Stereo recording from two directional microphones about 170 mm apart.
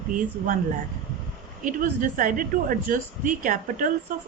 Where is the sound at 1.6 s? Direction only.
50° right (ahead or behind).